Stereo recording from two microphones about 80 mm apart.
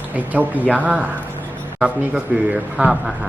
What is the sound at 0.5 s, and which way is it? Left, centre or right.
Speech, left.